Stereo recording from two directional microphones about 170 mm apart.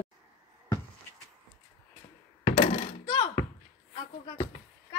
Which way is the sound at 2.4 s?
35° left (ahead or behind).